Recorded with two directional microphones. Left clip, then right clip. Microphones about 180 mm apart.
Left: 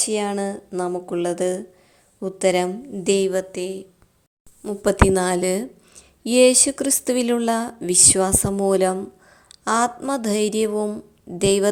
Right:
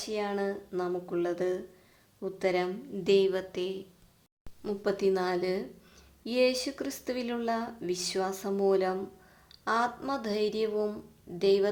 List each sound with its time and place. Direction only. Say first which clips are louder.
0.0 s a woman's voice: left 9 dB; 35° left (ahead or behind)
4.8 s a woman's voice: left 11 dB; 40° left (ahead or behind)